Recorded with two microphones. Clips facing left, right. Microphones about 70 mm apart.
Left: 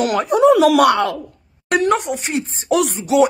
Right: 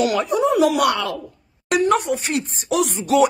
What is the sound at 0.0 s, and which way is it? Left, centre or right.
Speech, left.